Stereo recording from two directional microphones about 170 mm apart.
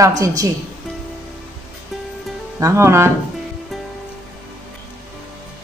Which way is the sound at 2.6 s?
15° right (ahead or behind).